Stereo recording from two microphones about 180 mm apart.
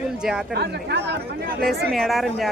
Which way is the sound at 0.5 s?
65° right (ahead or behind).